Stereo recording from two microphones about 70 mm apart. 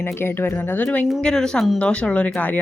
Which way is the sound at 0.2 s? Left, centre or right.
Left.